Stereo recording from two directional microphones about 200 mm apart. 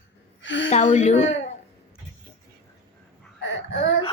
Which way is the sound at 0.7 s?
35° left (ahead or behind).